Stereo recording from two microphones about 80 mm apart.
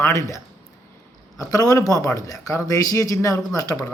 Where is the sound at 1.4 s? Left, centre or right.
Left.